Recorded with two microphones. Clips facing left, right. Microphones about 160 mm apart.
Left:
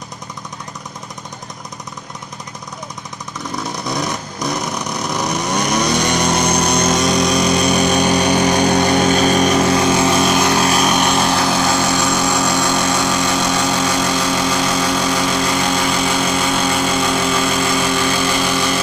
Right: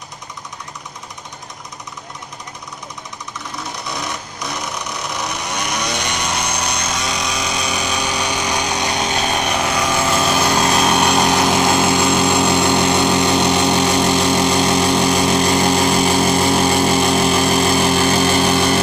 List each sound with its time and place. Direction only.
3.8 s vehicle: 40° left (ahead or behind)
11.1 s vehicle: 15° right (ahead or behind)
15.4 s vehicle: 35° right (ahead or behind)